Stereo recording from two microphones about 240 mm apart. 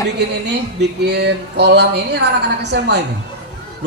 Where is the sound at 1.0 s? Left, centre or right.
Right.